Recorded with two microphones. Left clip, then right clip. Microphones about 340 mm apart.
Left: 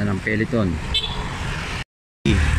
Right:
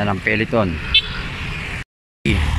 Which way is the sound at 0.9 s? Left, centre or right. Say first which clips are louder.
Right 8 dB; left.